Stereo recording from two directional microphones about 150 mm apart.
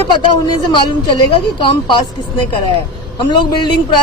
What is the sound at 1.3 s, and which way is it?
A woman's voice, 35° left (ahead or behind).